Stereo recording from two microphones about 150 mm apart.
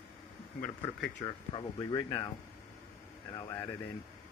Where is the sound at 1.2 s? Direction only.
45° left (ahead or behind).